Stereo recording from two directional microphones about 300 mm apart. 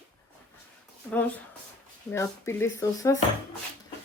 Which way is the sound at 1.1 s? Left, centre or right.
Centre.